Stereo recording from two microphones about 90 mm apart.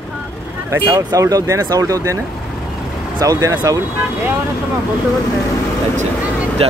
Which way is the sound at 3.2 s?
45° right (ahead or behind).